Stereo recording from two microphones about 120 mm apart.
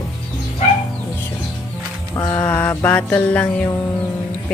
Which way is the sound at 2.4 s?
15° left (ahead or behind).